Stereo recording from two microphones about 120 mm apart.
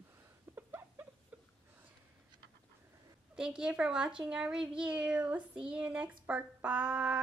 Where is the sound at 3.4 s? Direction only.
5° right (ahead or behind).